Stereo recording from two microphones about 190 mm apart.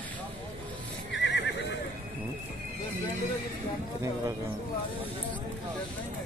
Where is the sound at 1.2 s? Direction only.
70° left (ahead or behind).